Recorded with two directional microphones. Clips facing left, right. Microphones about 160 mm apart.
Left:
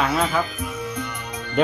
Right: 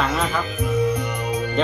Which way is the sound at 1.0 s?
10° right (ahead or behind).